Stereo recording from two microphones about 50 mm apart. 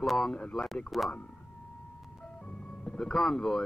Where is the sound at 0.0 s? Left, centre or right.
Centre.